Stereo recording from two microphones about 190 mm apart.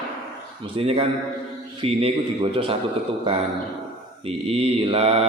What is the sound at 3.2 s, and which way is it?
Mantra, 30° right (ahead or behind).